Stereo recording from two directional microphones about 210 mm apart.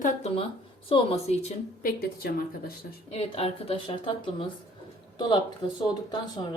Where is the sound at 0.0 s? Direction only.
30° left (ahead or behind).